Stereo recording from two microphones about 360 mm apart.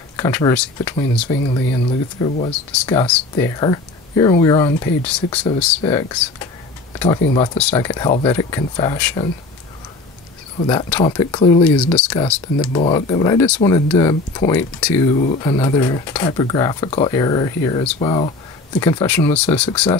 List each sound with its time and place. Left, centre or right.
0.2 s speech: centre
1.5 s speech: centre
2.8 s speech: centre
10.6 s speech: centre
15.1 s speech: centre